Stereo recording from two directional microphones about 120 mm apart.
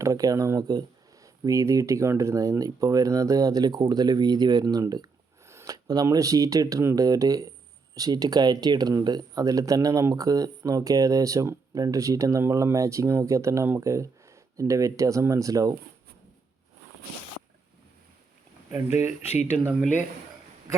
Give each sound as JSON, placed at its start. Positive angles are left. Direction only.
{"t": 0.0, "sound": "speech", "side_deg": -30}
{"t": 18.9, "sound": "speech", "side_deg": -20}